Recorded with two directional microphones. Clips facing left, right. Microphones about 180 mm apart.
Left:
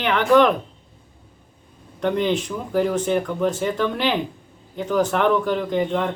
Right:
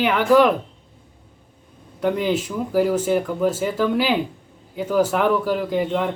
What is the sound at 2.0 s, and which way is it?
Speech, 5° right (ahead or behind).